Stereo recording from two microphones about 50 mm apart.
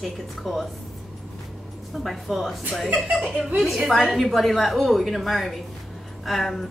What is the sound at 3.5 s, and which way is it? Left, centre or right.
A woman's voice, centre.